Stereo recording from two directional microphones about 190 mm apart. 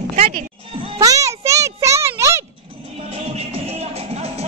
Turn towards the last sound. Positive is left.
turn(degrees=-35)  # may be behind; listen again after turning